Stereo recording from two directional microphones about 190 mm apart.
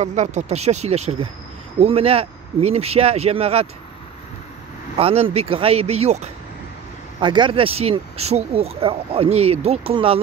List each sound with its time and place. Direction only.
0.0 s speech: 40° right (ahead or behind)
4.9 s speech: 30° right (ahead or behind)
7.2 s speech: 25° right (ahead or behind)